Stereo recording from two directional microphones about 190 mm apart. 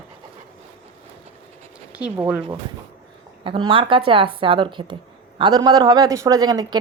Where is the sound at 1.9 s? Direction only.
5° right (ahead or behind).